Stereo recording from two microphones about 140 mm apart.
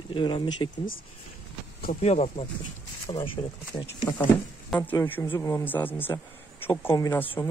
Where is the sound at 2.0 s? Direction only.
50° left (ahead or behind).